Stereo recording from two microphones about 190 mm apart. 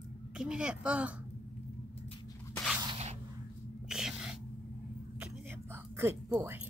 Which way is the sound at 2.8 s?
25° right (ahead or behind).